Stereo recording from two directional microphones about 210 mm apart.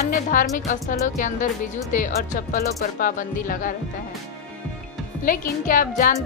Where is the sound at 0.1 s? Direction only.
40° left (ahead or behind).